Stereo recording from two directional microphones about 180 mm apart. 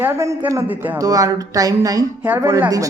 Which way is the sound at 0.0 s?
15° right (ahead or behind).